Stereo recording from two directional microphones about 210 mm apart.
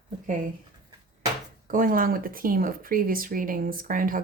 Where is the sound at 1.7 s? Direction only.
40° right (ahead or behind).